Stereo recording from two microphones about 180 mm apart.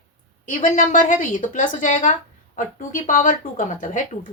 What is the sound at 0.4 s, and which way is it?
Speech, 45° left (ahead or behind).